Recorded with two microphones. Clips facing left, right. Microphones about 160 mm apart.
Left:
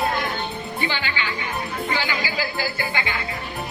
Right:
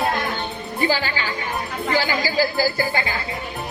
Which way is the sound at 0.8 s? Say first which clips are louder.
Right 6 dB; 40° right (ahead or behind).